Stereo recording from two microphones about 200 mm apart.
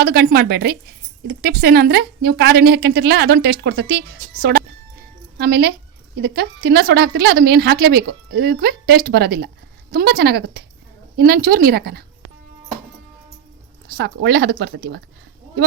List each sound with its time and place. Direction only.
0.0 s a woman's voice: 50° right (ahead or behind)
13.8 s a woman's voice: 55° right (ahead or behind)